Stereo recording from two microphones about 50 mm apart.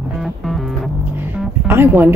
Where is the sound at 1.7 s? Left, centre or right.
Right.